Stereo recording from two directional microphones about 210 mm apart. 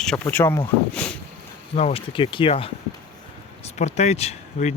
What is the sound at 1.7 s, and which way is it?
Speech, 25° left (ahead or behind).